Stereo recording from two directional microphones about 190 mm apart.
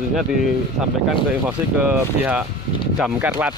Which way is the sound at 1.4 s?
10° right (ahead or behind).